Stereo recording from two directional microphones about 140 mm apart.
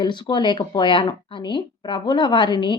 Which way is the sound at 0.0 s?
30° left (ahead or behind).